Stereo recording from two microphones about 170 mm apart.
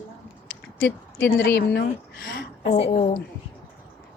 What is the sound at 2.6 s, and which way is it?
Speech, 40° left (ahead or behind).